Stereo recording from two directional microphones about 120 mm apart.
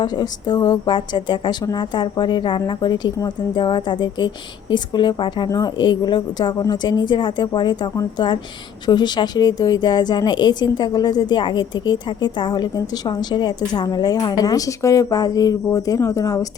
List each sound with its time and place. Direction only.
0.0 s speech: 35° left (ahead or behind)